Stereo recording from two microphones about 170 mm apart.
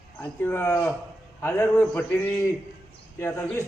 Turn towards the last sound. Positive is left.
turn(degrees=15)  # may be behind; listen again after turning